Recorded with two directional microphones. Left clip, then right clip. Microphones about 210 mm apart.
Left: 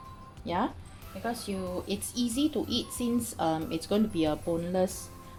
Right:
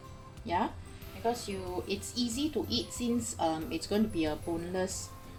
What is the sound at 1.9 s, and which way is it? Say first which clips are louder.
Speech: left 2 dB; 40° left (ahead or behind).